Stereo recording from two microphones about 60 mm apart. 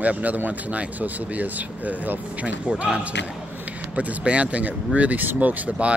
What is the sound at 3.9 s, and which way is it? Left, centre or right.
Speech, right.